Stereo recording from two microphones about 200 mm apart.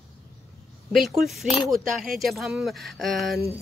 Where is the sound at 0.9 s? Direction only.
Centre (ahead or behind).